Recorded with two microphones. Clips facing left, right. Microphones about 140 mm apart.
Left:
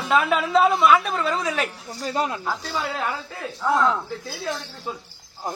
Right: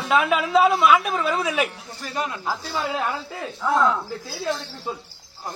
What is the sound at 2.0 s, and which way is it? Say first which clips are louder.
Speech: left 4 dB; 30° left (ahead or behind).